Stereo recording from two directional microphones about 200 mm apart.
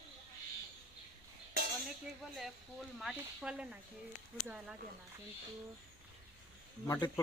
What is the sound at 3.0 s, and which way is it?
Speech, 5° right (ahead or behind).